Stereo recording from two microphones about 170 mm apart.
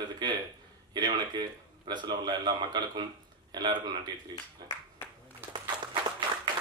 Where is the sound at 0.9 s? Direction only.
25° right (ahead or behind).